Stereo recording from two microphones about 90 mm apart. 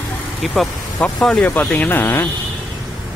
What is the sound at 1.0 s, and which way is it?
Speech, 10° left (ahead or behind).